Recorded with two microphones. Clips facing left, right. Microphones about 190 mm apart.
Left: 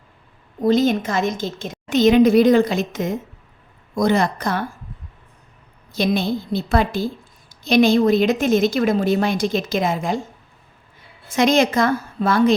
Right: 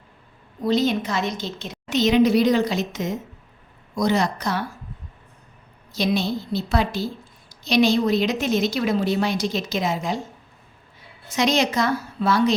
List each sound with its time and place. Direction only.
0.6 s a woman's voice: 50° left (ahead or behind)
5.9 s a woman's voice: 55° left (ahead or behind)
11.3 s a woman's voice: 50° left (ahead or behind)